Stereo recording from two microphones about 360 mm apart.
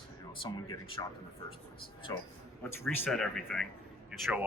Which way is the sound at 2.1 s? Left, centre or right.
Centre.